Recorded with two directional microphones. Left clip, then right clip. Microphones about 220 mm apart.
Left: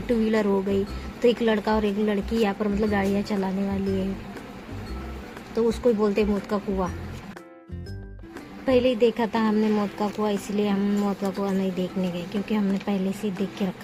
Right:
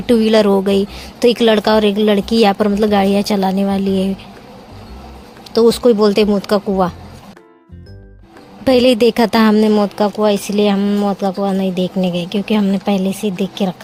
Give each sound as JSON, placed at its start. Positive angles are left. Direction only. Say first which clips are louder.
{"t": 0.1, "sound": "speech", "louder": "right 12 dB", "side_deg": -40}
{"t": 5.5, "sound": "speech", "louder": "right 11 dB", "side_deg": -40}
{"t": 8.6, "sound": "speech", "louder": "right 9 dB", "side_deg": -40}